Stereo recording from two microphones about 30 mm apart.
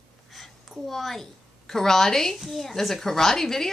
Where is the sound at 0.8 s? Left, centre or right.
Centre.